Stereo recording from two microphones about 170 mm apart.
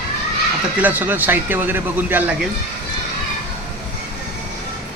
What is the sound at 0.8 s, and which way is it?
Speech, 10° right (ahead or behind).